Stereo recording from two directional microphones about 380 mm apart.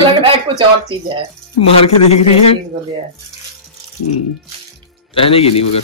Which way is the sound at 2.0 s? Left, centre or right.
Centre.